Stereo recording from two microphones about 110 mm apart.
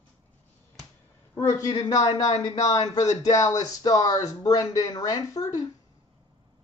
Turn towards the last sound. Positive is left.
turn(degrees=30)  # may be behind; listen again after turning